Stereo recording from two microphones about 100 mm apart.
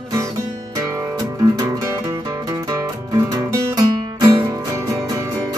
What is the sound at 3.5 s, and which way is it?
Music, 35° right (ahead or behind).